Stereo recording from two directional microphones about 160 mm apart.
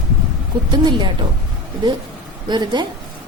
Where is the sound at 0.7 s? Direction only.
30° right (ahead or behind).